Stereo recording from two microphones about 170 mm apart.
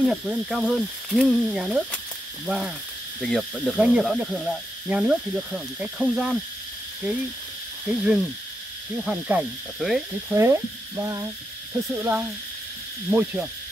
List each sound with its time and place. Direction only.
0.1 s speech: centre (ahead or behind)
7.8 s speech: 5° right (ahead or behind)
10.3 s frying: 15° right (ahead or behind)